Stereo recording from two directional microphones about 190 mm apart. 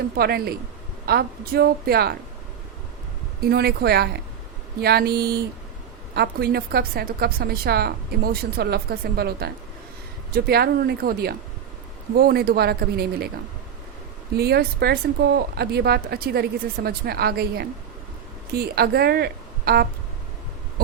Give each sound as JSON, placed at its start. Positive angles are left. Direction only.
{"t": 0.2, "sound": "a woman's voice", "side_deg": -55}
{"t": 3.5, "sound": "a woman's voice", "side_deg": -60}
{"t": 14.3, "sound": "a woman's voice", "side_deg": -55}